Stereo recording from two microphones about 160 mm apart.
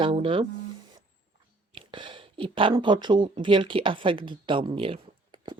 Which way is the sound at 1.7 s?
30° right (ahead or behind).